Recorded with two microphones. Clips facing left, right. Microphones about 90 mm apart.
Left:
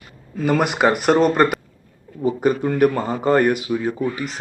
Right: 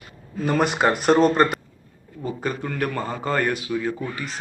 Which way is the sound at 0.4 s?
10° left (ahead or behind).